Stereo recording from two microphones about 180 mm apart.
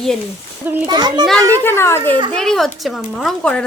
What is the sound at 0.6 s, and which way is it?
Speech, 10° right (ahead or behind).